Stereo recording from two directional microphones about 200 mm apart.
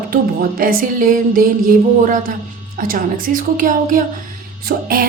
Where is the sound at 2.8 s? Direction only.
45° right (ahead or behind).